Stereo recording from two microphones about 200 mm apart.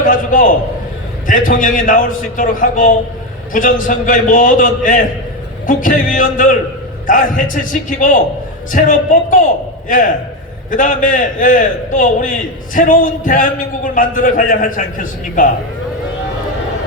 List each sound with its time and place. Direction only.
0.0 s a man's voice: 40° left (ahead or behind)
10.7 s a man's voice: 40° left (ahead or behind)